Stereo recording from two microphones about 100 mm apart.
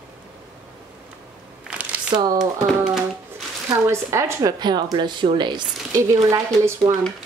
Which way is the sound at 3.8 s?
25° right (ahead or behind).